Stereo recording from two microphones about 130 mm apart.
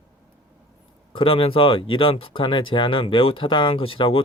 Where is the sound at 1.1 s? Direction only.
45° left (ahead or behind).